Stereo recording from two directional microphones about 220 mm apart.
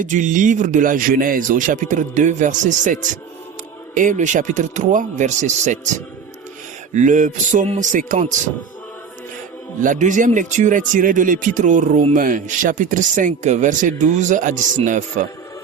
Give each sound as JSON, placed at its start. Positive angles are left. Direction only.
{"t": 0.0, "sound": "speech", "side_deg": -35}
{"t": 6.9, "sound": "speech", "side_deg": -35}
{"t": 9.8, "sound": "speech", "side_deg": -35}